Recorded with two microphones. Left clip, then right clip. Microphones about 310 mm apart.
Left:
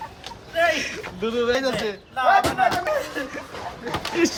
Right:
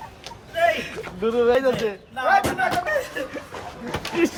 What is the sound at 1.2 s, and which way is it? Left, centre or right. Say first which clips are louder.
Speech: right 3 dB; centre.